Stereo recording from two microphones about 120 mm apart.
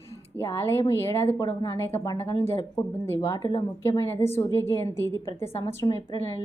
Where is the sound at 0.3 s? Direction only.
20° left (ahead or behind).